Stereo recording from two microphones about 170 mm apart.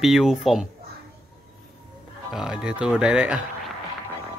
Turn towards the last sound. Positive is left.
turn(degrees=-5)  # may be behind; listen again after turning